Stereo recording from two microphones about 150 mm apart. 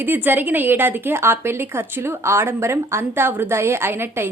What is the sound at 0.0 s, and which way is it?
A woman's voice, 10° right (ahead or behind).